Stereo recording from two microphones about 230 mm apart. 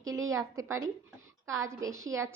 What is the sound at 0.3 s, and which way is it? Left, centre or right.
A woman's voice, centre.